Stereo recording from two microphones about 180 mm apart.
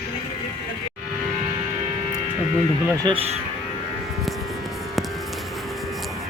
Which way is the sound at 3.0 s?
30° right (ahead or behind).